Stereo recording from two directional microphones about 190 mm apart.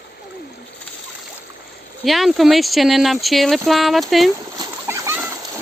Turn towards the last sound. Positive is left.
turn(degrees=-10)  # may be behind; listen again after turning